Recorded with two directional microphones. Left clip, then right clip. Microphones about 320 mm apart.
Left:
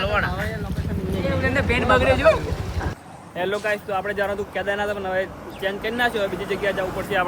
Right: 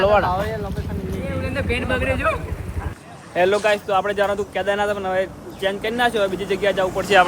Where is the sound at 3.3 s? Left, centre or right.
Centre.